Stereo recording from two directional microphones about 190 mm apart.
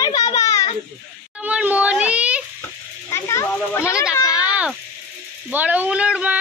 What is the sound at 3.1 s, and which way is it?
Children playing, 15° left (ahead or behind).